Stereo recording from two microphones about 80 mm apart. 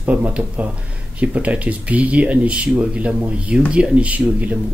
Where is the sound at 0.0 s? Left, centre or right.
Centre.